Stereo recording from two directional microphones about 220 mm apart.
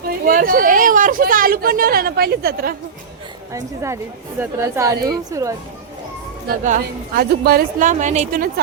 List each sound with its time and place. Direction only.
0.3 s speech: 40° right (ahead or behind)
3.5 s a woman's voice: 15° right (ahead or behind)
6.5 s speech: 40° right (ahead or behind)